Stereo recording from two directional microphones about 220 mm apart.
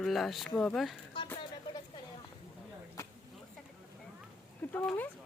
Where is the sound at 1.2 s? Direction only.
20° left (ahead or behind).